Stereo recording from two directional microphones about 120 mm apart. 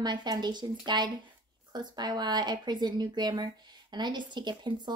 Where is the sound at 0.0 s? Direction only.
35° right (ahead or behind).